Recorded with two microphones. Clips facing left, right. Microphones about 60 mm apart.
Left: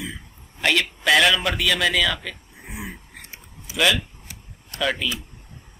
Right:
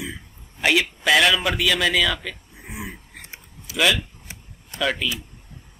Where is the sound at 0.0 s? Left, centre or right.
Centre.